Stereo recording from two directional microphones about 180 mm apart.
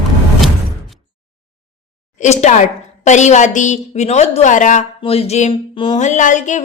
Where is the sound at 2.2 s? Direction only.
40° left (ahead or behind).